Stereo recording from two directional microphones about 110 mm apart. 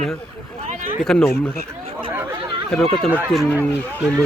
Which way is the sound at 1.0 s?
5° left (ahead or behind).